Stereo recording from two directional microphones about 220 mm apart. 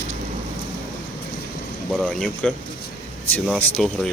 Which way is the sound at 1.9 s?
Centre (ahead or behind).